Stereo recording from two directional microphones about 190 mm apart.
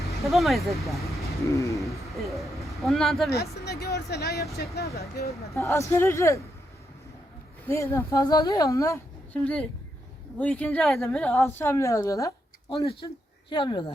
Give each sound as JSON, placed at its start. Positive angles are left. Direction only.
{"t": 0.3, "sound": "speech", "side_deg": 0}
{"t": 1.5, "sound": "speech", "side_deg": 15}
{"t": 1.8, "sound": "a man's voice", "side_deg": 0}
{"t": 3.2, "sound": "speech", "side_deg": 55}
{"t": 5.5, "sound": "speech", "side_deg": 15}
{"t": 7.7, "sound": "speech", "side_deg": 15}